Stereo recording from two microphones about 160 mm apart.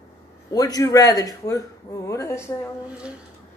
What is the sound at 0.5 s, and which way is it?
A man's voice, 20° left (ahead or behind).